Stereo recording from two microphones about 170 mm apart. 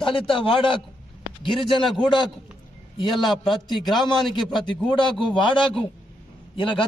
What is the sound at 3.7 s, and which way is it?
Speech, 25° left (ahead or behind).